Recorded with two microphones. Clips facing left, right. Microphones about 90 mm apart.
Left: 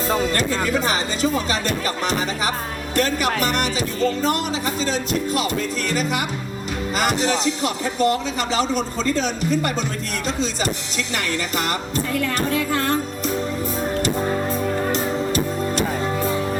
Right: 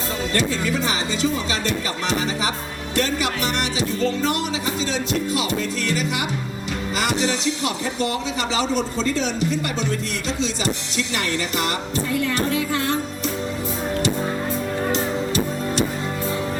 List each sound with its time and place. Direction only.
0.1 s speech: 50° left (ahead or behind)
12.1 s music: 50° left (ahead or behind)